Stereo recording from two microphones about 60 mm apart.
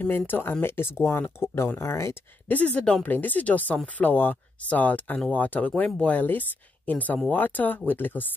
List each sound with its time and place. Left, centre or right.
0.3 s speech: left
2.4 s speech: left